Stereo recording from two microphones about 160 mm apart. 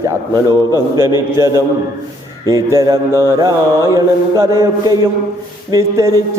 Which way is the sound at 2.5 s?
20° right (ahead or behind).